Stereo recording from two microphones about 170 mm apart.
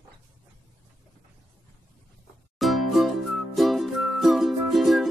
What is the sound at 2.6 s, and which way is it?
Music, centre (ahead or behind).